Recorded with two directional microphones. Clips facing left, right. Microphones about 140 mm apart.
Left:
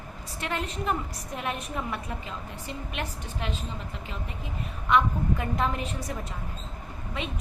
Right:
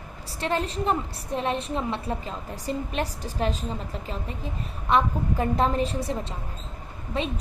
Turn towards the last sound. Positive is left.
turn(degrees=-35)  # may be behind; listen again after turning